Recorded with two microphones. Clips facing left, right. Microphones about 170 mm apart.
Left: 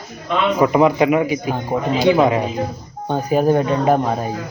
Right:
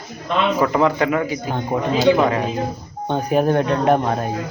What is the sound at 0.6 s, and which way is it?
Speech, 15° left (ahead or behind).